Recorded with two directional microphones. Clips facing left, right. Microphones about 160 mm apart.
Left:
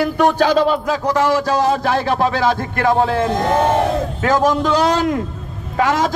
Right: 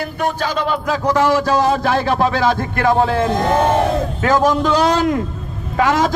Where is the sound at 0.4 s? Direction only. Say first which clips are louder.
Left 6 dB; 45° left (ahead or behind).